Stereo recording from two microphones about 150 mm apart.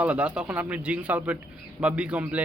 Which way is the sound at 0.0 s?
10° right (ahead or behind).